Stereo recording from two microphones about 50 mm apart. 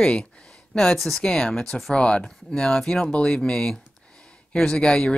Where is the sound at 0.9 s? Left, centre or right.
Centre.